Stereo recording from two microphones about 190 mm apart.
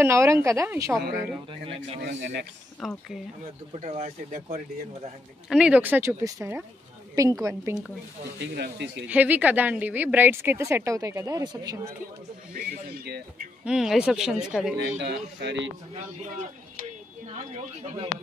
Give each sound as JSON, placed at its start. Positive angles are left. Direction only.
{"t": 0.0, "sound": "speech", "side_deg": -15}
{"t": 2.0, "sound": "speech", "side_deg": -70}
{"t": 2.8, "sound": "speech", "side_deg": 0}
{"t": 3.8, "sound": "speech", "side_deg": -35}
{"t": 5.5, "sound": "speech", "side_deg": -5}
{"t": 8.4, "sound": "speech", "side_deg": -65}
{"t": 9.0, "sound": "speech", "side_deg": -10}
{"t": 12.5, "sound": "speech", "side_deg": -55}
{"t": 13.7, "sound": "speech", "side_deg": -5}
{"t": 15.0, "sound": "speech", "side_deg": -65}
{"t": 17.3, "sound": "speech", "side_deg": -35}